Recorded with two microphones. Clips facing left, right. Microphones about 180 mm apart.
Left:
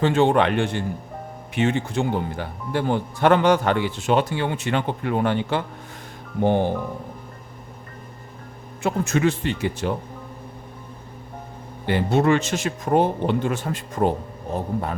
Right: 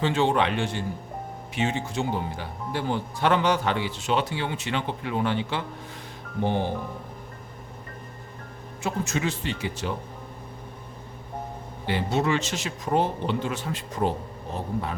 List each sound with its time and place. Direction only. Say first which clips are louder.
0.0 s speech: left 5 dB; 50° left (ahead or behind)
8.8 s speech: left 7 dB; 55° left (ahead or behind)
11.9 s speech: left 6 dB; 55° left (ahead or behind)